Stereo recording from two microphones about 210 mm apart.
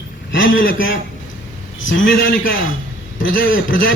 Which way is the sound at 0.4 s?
65° left (ahead or behind).